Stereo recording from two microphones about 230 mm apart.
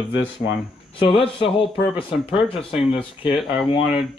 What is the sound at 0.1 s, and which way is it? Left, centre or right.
Speech, left.